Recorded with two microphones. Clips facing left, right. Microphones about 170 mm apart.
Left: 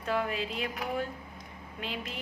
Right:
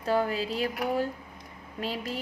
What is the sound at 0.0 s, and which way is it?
Speech, 35° right (ahead or behind).